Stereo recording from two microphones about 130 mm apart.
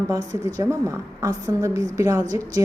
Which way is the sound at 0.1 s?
25° right (ahead or behind).